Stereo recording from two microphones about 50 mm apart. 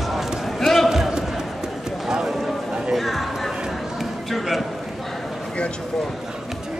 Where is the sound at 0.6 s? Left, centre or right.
Centre.